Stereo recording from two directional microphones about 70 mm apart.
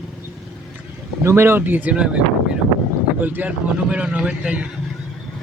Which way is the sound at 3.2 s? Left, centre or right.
Right.